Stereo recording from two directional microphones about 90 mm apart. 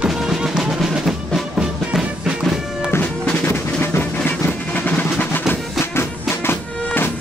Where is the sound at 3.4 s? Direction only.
25° left (ahead or behind).